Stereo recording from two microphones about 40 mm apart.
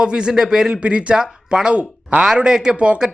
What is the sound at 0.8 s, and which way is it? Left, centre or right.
Speech, right.